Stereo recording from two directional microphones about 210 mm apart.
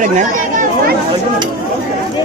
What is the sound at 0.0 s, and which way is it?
Speech, 35° right (ahead or behind).